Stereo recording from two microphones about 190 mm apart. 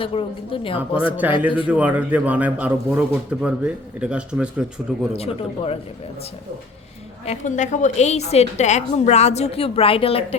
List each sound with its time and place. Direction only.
0.0 s speech: 30° left (ahead or behind)
1.6 s a man's voice: 5° right (ahead or behind)
5.1 s a woman's voice: 30° left (ahead or behind)
7.3 s a woman's voice: 40° left (ahead or behind)